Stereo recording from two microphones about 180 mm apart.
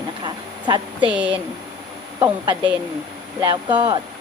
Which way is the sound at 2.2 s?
20° right (ahead or behind).